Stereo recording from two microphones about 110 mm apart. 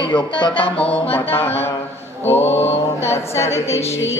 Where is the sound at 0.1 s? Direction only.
50° left (ahead or behind).